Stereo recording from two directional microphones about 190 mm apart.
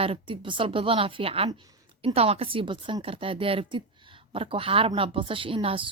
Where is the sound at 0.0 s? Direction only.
30° right (ahead or behind).